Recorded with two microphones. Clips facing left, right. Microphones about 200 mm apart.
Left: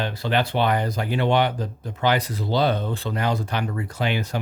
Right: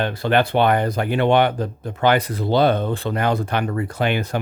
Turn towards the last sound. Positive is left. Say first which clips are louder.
# right 4 dB
turn(degrees=-55)  # may be behind; listen again after turning